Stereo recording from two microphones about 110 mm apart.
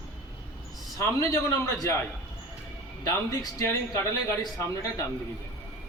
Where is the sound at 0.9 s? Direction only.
30° left (ahead or behind).